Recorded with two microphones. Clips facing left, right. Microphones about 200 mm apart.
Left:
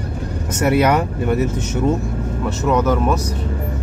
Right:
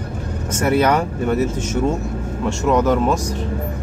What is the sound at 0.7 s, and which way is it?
Speech, 15° left (ahead or behind).